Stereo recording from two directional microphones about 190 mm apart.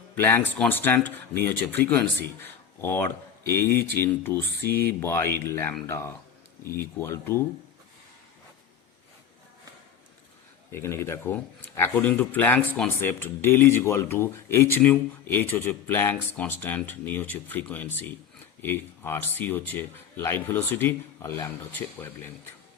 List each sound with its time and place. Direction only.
0.2 s speech: 10° left (ahead or behind)
3.6 s speech: 50° left (ahead or behind)
4.0 s speech: 10° left (ahead or behind)
10.7 s speech: 15° left (ahead or behind)